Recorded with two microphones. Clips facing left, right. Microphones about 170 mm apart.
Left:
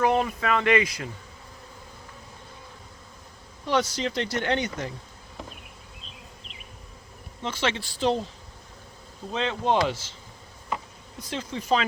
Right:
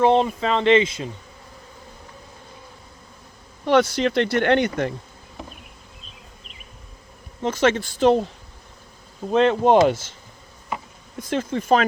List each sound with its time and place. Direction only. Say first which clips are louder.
0.0 s speech: right 6 dB; 25° right (ahead or behind)
3.7 s speech: right 8 dB; 60° right (ahead or behind)
7.4 s speech: right 9 dB; 45° right (ahead or behind)
9.3 s speech: right 9 dB; 55° right (ahead or behind)
11.2 s speech: right 8 dB; 50° right (ahead or behind)